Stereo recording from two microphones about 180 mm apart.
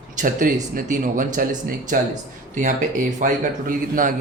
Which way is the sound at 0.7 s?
45° right (ahead or behind).